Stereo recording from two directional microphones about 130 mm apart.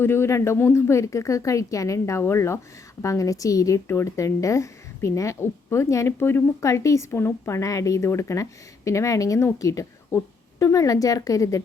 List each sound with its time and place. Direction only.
0.0 s speech: 20° left (ahead or behind)